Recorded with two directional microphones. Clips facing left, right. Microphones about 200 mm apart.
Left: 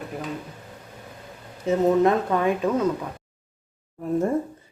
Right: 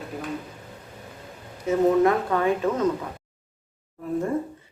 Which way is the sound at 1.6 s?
20° left (ahead or behind).